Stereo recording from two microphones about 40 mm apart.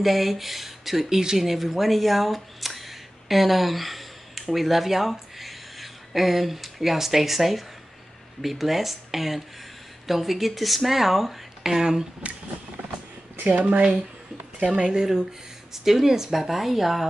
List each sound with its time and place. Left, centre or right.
0.0 s speech: centre
12.2 s speech: right
13.5 s speech: right
14.6 s speech: right
14.9 s speech: centre